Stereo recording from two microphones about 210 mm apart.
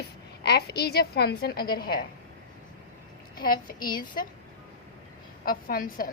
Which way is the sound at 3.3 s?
45° left (ahead or behind).